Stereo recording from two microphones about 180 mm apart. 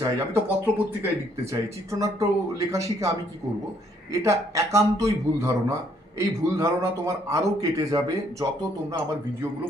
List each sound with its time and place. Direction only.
0.0 s a man's voice: 10° right (ahead or behind)